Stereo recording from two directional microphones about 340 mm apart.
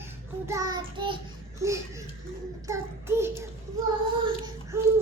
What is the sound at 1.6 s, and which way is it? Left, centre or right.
Laughter, centre.